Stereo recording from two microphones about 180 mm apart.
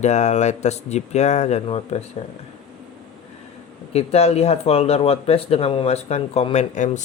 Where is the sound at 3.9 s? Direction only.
35° left (ahead or behind).